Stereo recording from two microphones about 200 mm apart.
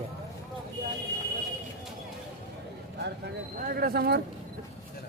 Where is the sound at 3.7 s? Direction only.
50° right (ahead or behind).